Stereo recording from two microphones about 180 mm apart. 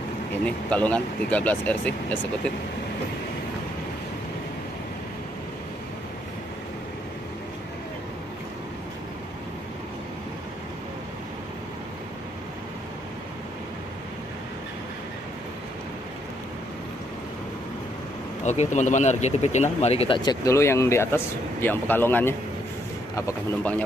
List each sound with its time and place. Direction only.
0.5 s speech: 5° left (ahead or behind)
18.4 s speech: 40° left (ahead or behind); by 23.8 s 10° left (ahead or behind)